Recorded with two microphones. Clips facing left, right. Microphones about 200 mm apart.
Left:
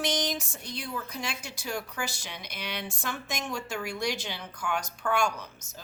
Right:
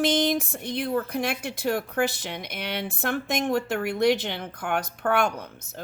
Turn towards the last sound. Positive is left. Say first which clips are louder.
# right 5 dB
turn(degrees=-55)  # may be behind; listen again after turning